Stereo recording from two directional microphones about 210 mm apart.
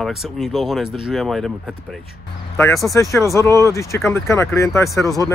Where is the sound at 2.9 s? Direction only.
15° left (ahead or behind).